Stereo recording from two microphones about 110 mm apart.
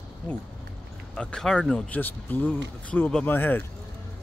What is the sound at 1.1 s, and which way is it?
Speech, 5° left (ahead or behind).